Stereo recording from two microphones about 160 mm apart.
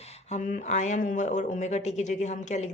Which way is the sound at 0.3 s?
50° left (ahead or behind).